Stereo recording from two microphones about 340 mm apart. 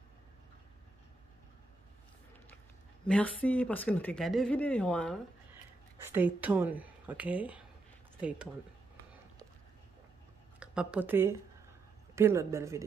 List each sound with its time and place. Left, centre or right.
3.1 s speech: centre
10.6 s a woman's voice: centre